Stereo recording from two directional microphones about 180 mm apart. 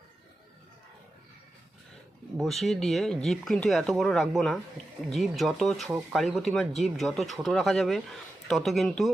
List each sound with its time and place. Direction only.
2.4 s speech: centre (ahead or behind)